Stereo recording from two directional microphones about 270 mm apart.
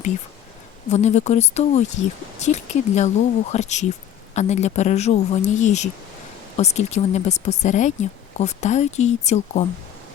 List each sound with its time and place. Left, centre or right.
0.9 s speech: left